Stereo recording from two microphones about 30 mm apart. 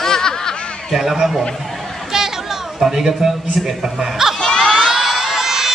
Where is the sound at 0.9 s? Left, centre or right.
Centre.